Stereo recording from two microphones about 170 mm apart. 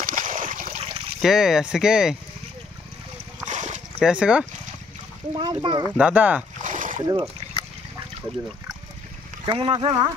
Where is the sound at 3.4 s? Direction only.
45° right (ahead or behind).